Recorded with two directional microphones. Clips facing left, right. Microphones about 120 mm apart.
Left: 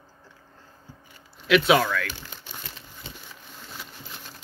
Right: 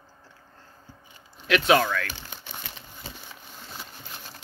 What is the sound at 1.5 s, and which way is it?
Speech, 5° left (ahead or behind).